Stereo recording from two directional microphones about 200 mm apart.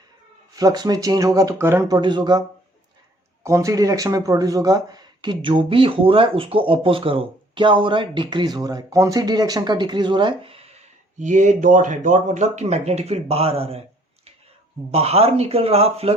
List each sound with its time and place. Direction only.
0.5 s speech: 20° right (ahead or behind)
3.4 s speech: 15° right (ahead or behind)
14.9 s speech: 30° right (ahead or behind)